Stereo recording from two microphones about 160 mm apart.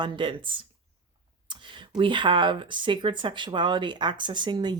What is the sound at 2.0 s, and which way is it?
Speech, 30° right (ahead or behind).